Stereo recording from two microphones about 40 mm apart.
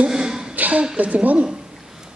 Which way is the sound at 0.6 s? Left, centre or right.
Right.